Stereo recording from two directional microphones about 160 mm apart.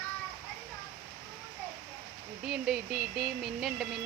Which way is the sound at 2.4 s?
Centre (ahead or behind).